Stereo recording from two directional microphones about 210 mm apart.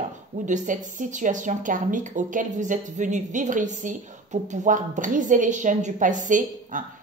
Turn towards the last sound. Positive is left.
turn(degrees=-40)  # may be behind; listen again after turning